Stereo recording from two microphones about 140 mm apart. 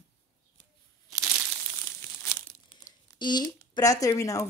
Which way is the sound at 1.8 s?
15° left (ahead or behind).